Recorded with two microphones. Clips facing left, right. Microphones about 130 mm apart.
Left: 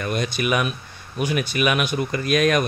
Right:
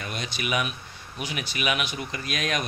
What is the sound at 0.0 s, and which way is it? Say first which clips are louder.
Speech: left 9 dB; 50° left (ahead or behind).